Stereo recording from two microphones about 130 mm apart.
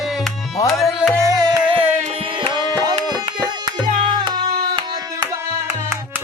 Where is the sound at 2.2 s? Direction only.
40° right (ahead or behind).